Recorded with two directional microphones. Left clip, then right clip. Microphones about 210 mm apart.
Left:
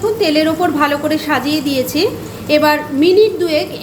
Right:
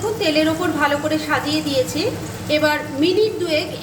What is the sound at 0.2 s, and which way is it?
A woman's voice, 30° left (ahead or behind).